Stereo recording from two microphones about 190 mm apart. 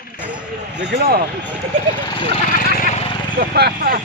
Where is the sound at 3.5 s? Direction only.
55° right (ahead or behind).